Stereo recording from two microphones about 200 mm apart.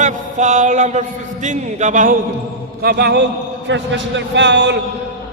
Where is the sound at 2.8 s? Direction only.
55° right (ahead or behind).